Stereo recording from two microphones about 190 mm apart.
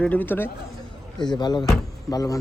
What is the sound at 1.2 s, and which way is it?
Speech, 20° left (ahead or behind).